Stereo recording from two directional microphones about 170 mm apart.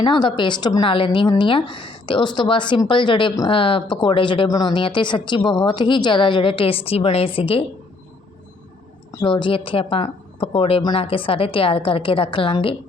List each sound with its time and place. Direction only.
0.0 s a woman's voice: 25° left (ahead or behind)
9.2 s a woman's voice: 30° left (ahead or behind)